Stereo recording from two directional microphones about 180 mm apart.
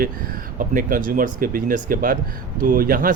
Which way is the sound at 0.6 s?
50° right (ahead or behind).